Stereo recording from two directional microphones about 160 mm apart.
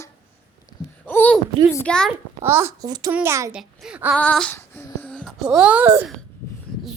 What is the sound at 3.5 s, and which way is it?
Speech, 5° right (ahead or behind).